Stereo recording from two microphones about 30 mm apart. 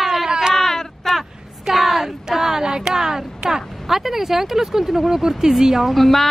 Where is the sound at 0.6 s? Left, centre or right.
Centre.